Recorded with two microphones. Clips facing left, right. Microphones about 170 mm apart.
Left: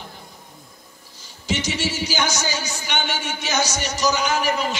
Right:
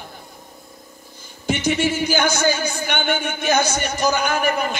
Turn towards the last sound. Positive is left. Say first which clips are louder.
# right 1 dB
turn(degrees=-55)  # may be behind; listen again after turning